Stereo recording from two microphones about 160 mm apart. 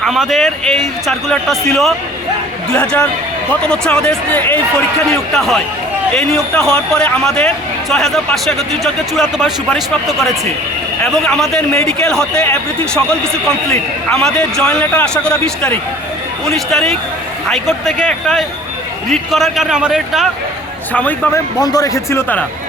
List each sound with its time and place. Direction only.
0.0 s a man's voice: centre (ahead or behind)
20.9 s speech: 10° left (ahead or behind)
21.3 s a man's voice: 25° left (ahead or behind)